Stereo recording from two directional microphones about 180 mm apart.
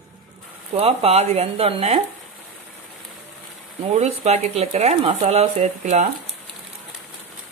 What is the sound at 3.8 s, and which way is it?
Speech, 40° right (ahead or behind).